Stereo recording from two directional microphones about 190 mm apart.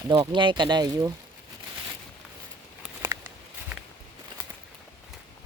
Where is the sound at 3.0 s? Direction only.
15° right (ahead or behind).